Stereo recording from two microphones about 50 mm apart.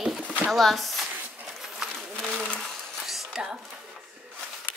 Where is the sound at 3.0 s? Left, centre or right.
Centre.